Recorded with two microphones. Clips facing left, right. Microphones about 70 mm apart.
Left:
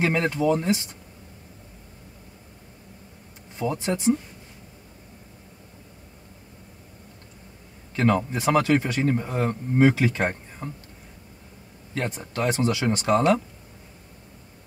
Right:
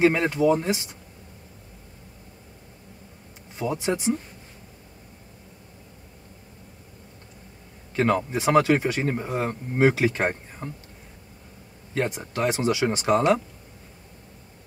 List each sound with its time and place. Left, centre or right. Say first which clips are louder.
0.0 s speech: right 3 dB; centre
3.5 s speech: even; centre
8.0 s speech: even; centre
11.9 s speech: right 3 dB; centre